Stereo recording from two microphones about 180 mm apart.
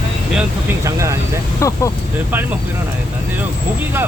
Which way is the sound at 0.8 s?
15° right (ahead or behind).